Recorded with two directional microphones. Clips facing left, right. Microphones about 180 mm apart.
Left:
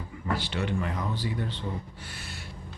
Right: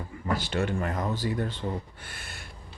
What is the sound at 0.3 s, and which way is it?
Speech, 45° right (ahead or behind).